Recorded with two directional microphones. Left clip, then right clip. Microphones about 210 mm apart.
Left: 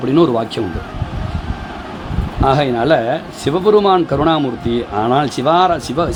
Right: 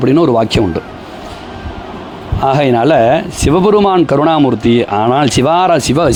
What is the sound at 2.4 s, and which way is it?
Speech, 35° right (ahead or behind).